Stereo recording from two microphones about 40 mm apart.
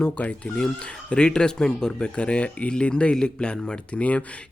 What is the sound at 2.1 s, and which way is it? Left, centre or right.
Speech, left.